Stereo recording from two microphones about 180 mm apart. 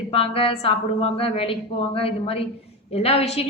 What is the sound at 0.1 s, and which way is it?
A woman's voice, 30° left (ahead or behind).